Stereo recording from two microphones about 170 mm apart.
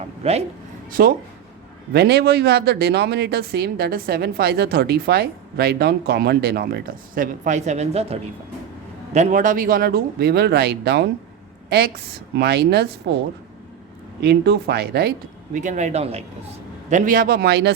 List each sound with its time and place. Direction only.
0.2 s speech: 40° right (ahead or behind)
0.9 s speech: 55° right (ahead or behind)
1.9 s speech: 70° right (ahead or behind)
7.4 s speech: 45° right (ahead or behind); by 11.1 s 75° right (ahead or behind)
12.4 s speech: 70° right (ahead or behind)
14.2 s speech: 75° right (ahead or behind)
15.5 s speech: 45° right (ahead or behind)
16.9 s speech: 55° right (ahead or behind); by 17.7 s 75° right (ahead or behind)